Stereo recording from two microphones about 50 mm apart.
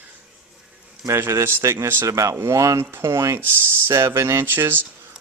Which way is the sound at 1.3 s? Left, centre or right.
Right.